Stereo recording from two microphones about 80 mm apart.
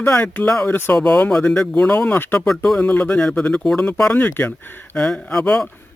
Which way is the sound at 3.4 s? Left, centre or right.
Centre.